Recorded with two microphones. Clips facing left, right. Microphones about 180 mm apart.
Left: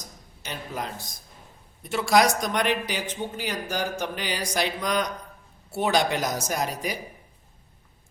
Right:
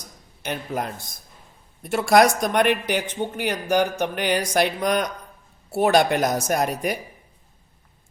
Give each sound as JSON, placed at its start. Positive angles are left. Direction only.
{"t": 0.4, "sound": "speech", "side_deg": -55}